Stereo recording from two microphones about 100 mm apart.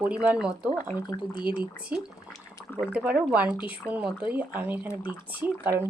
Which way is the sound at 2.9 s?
10° right (ahead or behind).